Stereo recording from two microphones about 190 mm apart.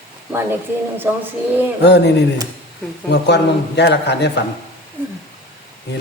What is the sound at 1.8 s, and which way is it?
A man's voice, 60° left (ahead or behind).